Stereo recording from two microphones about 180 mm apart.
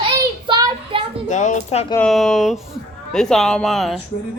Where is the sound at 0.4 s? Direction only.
25° right (ahead or behind).